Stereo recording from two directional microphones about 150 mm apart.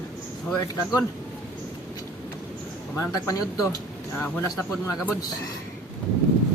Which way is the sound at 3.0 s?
20° left (ahead or behind).